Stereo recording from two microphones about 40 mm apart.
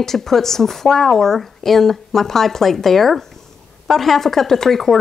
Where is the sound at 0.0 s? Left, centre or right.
Centre.